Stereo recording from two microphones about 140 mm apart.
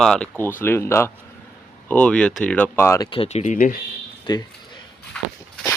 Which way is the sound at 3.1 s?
45° left (ahead or behind).